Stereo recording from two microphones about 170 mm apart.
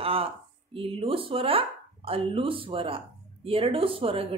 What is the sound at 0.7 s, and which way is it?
Speech, 30° right (ahead or behind).